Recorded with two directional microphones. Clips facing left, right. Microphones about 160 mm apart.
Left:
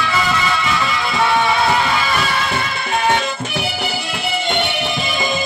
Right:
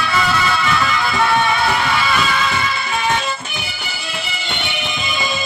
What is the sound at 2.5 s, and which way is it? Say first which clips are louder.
Music: even; 55° left (ahead or behind).